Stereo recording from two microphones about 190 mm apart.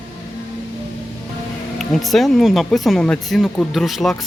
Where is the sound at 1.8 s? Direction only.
Centre (ahead or behind).